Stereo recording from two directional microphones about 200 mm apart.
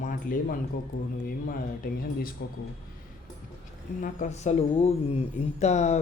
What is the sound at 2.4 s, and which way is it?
Speech, 60° left (ahead or behind).